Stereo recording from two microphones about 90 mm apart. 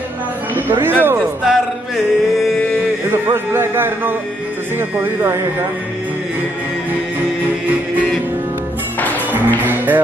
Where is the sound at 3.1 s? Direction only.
30° right (ahead or behind).